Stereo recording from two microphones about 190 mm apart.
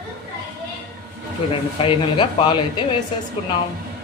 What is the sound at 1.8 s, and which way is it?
Speech, 25° left (ahead or behind).